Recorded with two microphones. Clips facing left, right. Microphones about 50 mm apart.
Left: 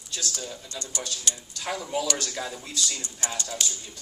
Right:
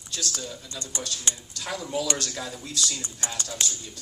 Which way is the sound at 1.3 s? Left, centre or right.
Right.